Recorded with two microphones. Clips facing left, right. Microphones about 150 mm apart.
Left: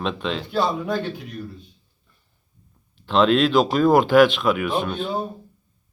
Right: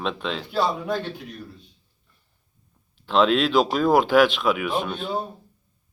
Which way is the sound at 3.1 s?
5° right (ahead or behind).